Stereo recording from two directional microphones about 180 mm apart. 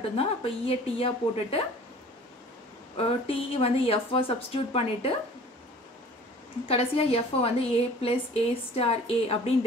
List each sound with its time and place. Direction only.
0.2 s a woman's voice: 30° left (ahead or behind)
3.0 s a woman's voice: 30° left (ahead or behind)
6.7 s a woman's voice: 30° left (ahead or behind)